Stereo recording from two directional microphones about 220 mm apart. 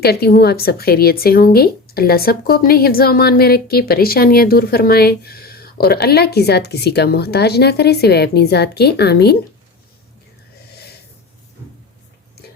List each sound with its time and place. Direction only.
0.0 s speech: 45° left (ahead or behind)